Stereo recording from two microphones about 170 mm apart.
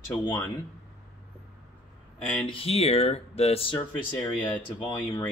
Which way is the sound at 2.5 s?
35° left (ahead or behind).